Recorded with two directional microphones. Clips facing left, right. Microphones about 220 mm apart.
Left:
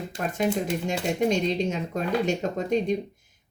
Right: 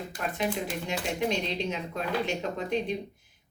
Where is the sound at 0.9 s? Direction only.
45° left (ahead or behind).